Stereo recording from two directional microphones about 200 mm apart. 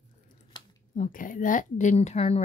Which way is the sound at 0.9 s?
40° left (ahead or behind).